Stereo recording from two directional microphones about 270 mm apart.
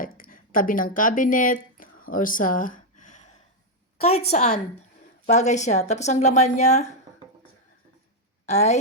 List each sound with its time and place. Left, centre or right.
0.0 s a sound: left
4.3 s speech: left
8.4 s speech: left